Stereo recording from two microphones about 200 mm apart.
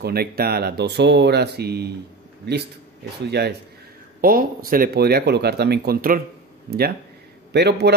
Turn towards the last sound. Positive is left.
turn(degrees=-55)  # may be behind; listen again after turning